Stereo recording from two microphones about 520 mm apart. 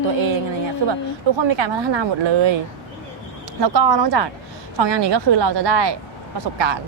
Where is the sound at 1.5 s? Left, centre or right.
Right.